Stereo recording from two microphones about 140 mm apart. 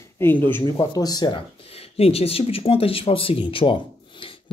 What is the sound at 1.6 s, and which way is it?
Speech, 45° left (ahead or behind).